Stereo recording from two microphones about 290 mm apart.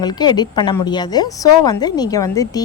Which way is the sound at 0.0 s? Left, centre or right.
Centre.